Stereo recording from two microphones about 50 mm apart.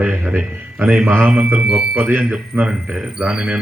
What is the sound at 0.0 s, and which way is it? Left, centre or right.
Speech, right.